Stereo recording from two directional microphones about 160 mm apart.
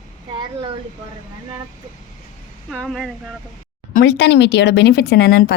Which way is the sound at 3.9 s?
90° left.